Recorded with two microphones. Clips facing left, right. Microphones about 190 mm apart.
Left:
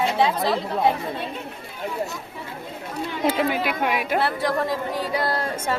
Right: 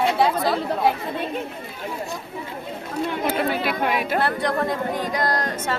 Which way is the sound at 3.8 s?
10° left (ahead or behind).